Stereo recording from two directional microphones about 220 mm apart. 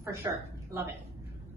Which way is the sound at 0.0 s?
10° right (ahead or behind).